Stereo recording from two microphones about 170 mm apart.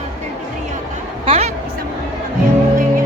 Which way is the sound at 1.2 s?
35° right (ahead or behind).